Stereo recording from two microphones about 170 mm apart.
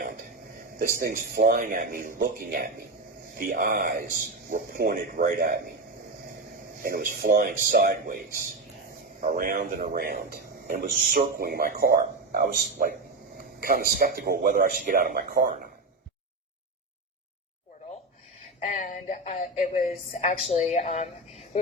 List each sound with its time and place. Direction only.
0.8 s speech: 60° right (ahead or behind)
6.8 s speech: 60° right (ahead or behind)
9.2 s speech: 55° right (ahead or behind)
18.6 s music: 40° left (ahead or behind)
19.8 s a woman's voice: 35° left (ahead or behind)